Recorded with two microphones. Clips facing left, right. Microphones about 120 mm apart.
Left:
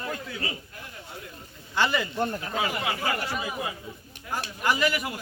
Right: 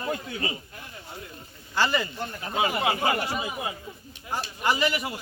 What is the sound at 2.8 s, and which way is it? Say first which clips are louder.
Speech: right 4 dB; 25° right (ahead or behind).